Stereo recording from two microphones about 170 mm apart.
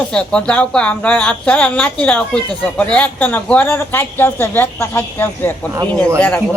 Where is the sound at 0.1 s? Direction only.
5° left (ahead or behind).